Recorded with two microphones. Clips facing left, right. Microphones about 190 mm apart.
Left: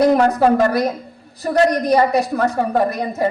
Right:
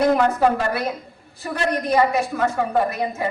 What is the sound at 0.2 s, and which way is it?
A woman's voice, 40° left (ahead or behind).